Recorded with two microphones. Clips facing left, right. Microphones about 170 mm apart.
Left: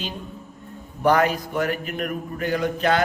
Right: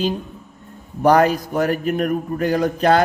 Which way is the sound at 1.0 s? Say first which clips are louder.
Right 5 dB; 40° right (ahead or behind).